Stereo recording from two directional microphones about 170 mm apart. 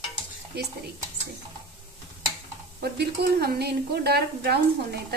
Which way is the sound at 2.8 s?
70° right (ahead or behind).